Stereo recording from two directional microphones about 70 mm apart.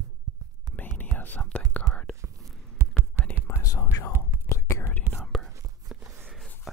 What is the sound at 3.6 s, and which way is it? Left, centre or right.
Whispering, left.